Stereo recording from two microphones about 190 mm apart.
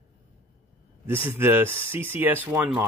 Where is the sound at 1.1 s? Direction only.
10° right (ahead or behind).